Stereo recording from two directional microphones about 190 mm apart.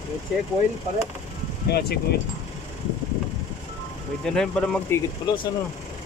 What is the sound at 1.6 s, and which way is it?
Speech, 55° left (ahead or behind).